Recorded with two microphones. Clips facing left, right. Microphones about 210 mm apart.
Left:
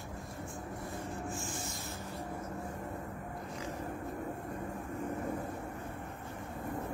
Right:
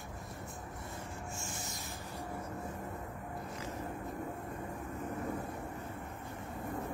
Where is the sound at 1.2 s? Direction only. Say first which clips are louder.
Left 4 dB; 15° left (ahead or behind).